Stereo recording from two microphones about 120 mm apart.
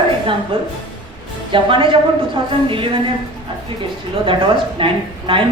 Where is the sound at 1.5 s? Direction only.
45° right (ahead or behind).